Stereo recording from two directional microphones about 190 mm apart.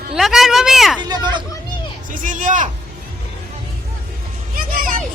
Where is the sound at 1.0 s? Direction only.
20° right (ahead or behind).